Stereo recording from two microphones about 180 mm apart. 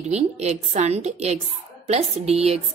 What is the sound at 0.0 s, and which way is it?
A woman's voice, 35° right (ahead or behind).